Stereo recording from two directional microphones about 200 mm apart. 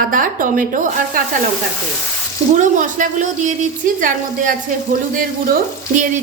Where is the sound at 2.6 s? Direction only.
40° right (ahead or behind).